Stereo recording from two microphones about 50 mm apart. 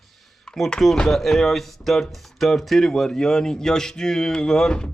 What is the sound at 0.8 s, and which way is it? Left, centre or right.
Speech, centre.